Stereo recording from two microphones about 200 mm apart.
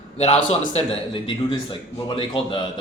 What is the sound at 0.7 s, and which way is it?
A man's voice, 30° left (ahead or behind).